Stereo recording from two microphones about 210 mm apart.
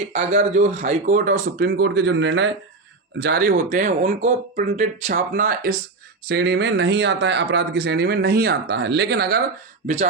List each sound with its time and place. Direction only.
0.1 s speech: 35° right (ahead or behind); by 9.4 s 50° right (ahead or behind)
9.8 s speech: 35° right (ahead or behind)